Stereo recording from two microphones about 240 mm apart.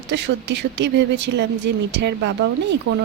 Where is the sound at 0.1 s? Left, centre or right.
Right.